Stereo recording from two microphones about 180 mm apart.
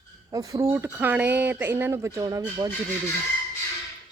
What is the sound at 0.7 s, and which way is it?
Speech, 15° right (ahead or behind).